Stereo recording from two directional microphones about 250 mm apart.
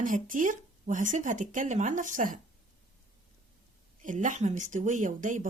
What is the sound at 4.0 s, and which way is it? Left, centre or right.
Speech, right.